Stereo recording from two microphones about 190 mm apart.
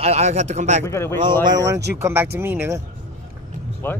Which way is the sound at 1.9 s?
15° right (ahead or behind).